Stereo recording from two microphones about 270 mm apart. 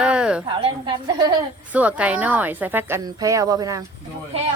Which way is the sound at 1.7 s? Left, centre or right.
Centre.